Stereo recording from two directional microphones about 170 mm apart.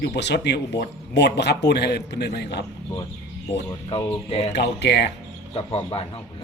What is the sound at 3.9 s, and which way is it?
Speech, 35° left (ahead or behind).